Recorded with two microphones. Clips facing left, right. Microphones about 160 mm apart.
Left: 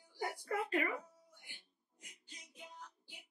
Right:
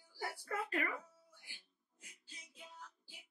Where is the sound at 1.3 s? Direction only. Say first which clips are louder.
Left 2 dB; 20° left (ahead or behind).